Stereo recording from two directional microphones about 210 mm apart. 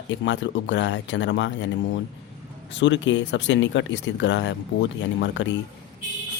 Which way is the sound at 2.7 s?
60° left (ahead or behind).